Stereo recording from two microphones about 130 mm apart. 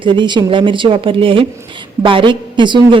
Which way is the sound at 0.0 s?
35° right (ahead or behind).